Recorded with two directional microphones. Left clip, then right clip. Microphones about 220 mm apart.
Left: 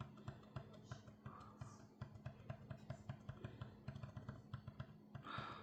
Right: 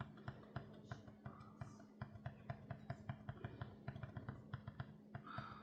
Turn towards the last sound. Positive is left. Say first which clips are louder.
# left 2 dB
turn(degrees=45)  # may be behind; listen again after turning